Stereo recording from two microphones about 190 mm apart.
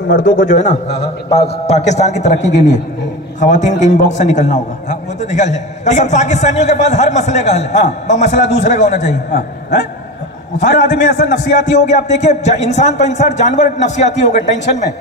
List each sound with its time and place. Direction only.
0.1 s a man's voice: 80° left
0.5 s a man's voice: 40° left (ahead or behind)
10.6 s a man's voice: 40° left (ahead or behind)